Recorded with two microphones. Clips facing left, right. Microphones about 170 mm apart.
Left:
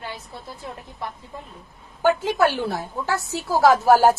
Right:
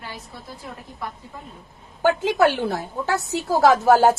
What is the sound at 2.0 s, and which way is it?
Speech, 15° right (ahead or behind).